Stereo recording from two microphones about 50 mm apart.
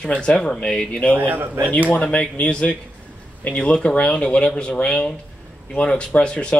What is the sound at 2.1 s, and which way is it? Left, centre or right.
Speech, left.